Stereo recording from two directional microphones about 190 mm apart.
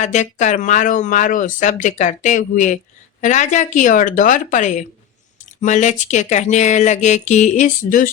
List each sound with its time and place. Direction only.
0.0 s speech: 40° left (ahead or behind)